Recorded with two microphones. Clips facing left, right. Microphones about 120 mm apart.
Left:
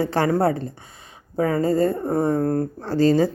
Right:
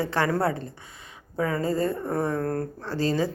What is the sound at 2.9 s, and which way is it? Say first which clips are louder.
Speech: left 8 dB; 45° left (ahead or behind).